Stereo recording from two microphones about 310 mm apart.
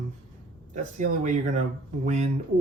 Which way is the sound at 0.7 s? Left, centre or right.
Right.